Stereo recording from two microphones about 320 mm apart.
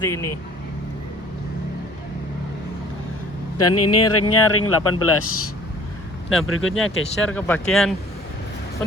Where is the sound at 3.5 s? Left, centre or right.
Left.